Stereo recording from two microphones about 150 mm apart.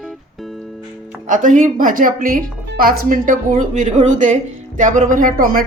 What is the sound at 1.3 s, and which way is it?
A woman's voice, 60° right (ahead or behind).